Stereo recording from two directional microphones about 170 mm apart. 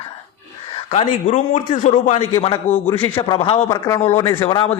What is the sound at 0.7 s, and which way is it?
A man's voice, 35° left (ahead or behind).